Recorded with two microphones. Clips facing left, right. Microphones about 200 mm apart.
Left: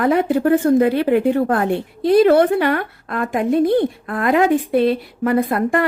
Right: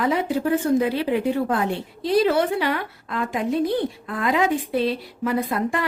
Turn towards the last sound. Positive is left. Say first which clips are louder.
# left 6 dB
turn(degrees=55)  # may be behind; listen again after turning